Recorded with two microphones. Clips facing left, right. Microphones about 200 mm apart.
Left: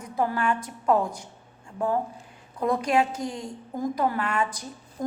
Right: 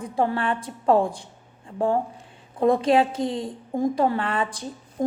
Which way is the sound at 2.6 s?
25° right (ahead or behind).